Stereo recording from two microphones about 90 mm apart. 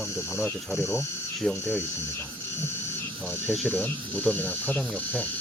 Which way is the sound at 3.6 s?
15° left (ahead or behind).